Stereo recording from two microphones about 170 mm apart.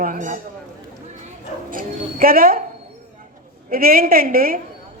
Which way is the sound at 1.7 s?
55° right (ahead or behind).